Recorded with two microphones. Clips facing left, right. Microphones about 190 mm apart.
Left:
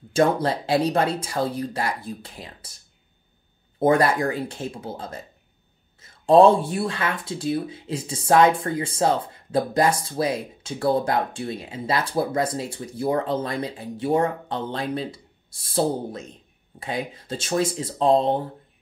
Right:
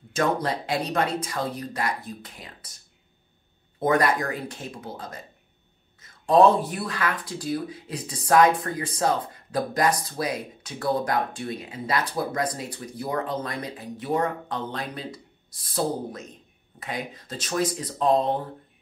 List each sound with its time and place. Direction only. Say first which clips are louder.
0.1 s speech: left 4 dB; 30° left (ahead or behind)
3.8 s speech: left 3 dB; 30° left (ahead or behind)